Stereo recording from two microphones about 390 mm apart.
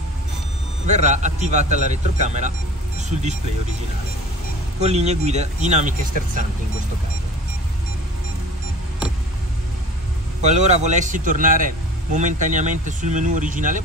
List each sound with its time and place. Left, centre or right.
0.8 s speech: centre
4.7 s speech: centre
10.4 s speech: centre